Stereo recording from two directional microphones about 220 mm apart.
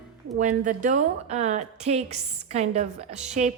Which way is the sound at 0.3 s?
35° right (ahead or behind).